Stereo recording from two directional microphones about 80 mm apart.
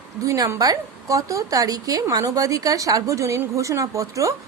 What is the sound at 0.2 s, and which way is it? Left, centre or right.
A woman's voice, right.